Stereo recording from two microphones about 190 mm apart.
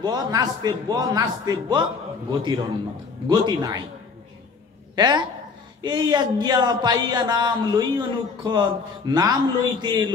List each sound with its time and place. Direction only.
0.0 s speech: 20° right (ahead or behind)
4.9 s a man's voice: 20° right (ahead or behind)